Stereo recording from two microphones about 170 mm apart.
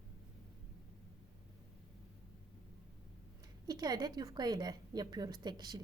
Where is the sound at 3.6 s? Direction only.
25° right (ahead or behind).